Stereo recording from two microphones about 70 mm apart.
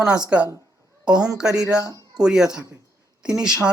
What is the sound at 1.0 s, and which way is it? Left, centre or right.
A woman's voice, centre.